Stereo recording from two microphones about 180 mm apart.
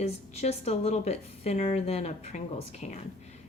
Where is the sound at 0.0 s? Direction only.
35° left (ahead or behind).